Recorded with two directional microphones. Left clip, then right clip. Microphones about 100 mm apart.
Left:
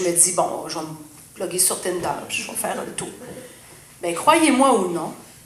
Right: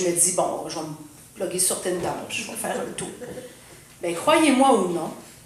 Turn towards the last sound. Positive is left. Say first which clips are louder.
# left 2 dB
turn(degrees=35)  # may be behind; listen again after turning